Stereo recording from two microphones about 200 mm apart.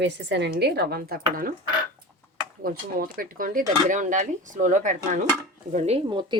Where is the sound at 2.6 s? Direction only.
45° right (ahead or behind).